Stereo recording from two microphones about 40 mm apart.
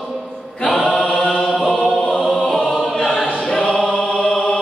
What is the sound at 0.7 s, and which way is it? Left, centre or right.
Chant, left.